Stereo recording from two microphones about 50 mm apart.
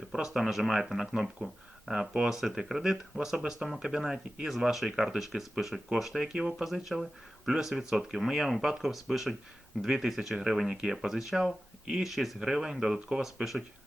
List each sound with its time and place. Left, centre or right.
0.1 s speech: centre
1.9 s speech: centre
2.3 s speech: centre
6.7 s speech: centre
10.7 s speech: centre
10.9 s speech: centre